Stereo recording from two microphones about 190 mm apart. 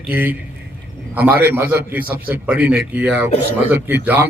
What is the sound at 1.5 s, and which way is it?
A man's voice, 10° right (ahead or behind).